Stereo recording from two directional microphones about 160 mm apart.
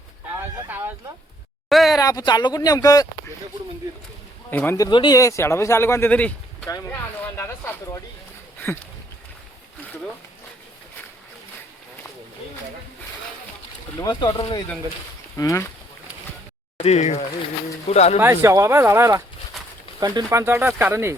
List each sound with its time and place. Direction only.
1.7 s a sound: centre (ahead or behind)
2.0 s speech: 25° left (ahead or behind)
4.5 s speech: 10° left (ahead or behind)
4.8 s speech: 25° left (ahead or behind)
8.6 s a sound: 15° left (ahead or behind)
14.0 s speech: 25° left (ahead or behind)
16.7 s speech: 40° left (ahead or behind)
18.2 s speech: 15° right (ahead or behind)